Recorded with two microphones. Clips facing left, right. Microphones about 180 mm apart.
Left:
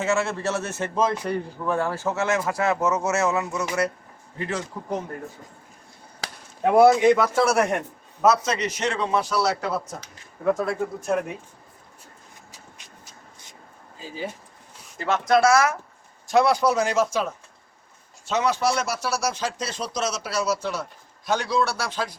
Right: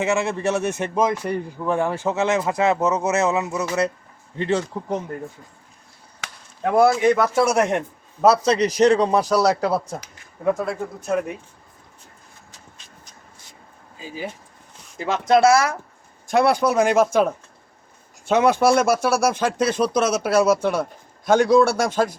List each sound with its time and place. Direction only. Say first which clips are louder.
0.0 s a man's voice: right 3 dB; 15° right (ahead or behind)
6.2 s basketball bounce: left 3 dB; 35° left (ahead or behind)
6.7 s a man's voice: left 1 dB; 15° left (ahead or behind)
7.3 s speech: right 2 dB; 20° right (ahead or behind)
8.2 s a man's voice: right 4 dB; 35° right (ahead or behind)
10.4 s speech: right 1 dB; centre (ahead or behind)
12.5 s a sound: even; 10° left (ahead or behind)
14.9 s speech: right 3 dB; 15° right (ahead or behind)
16.2 s speech: right 1 dB; 55° right (ahead or behind)